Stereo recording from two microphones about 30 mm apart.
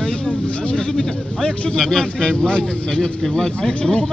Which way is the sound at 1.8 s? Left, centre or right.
Centre.